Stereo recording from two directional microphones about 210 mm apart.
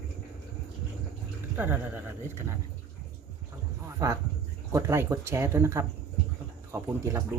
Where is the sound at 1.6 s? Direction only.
10° right (ahead or behind).